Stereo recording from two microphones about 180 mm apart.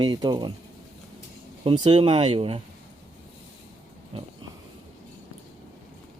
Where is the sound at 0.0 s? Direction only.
25° right (ahead or behind).